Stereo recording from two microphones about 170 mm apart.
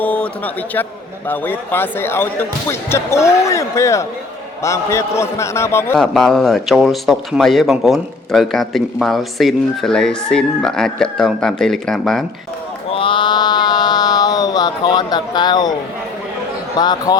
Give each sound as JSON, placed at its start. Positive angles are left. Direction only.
{"t": 0.0, "sound": "speech", "side_deg": 10}
{"t": 6.0, "sound": "speech", "side_deg": 0}
{"t": 12.9, "sound": "mantra", "side_deg": 30}
{"t": 16.7, "sound": "speech", "side_deg": 25}